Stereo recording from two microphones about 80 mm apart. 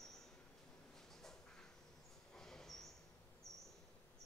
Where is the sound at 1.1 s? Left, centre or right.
Centre.